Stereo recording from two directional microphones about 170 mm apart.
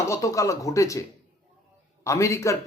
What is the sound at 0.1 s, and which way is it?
Speech, 20° left (ahead or behind).